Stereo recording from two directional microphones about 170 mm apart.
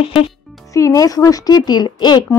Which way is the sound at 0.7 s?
20° left (ahead or behind).